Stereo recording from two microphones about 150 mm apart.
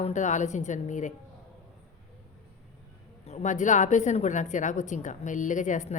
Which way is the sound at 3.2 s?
50° left (ahead or behind).